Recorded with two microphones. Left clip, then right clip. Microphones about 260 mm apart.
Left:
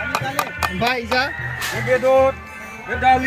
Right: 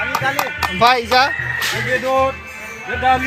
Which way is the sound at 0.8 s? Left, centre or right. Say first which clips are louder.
Right 8 dB; centre.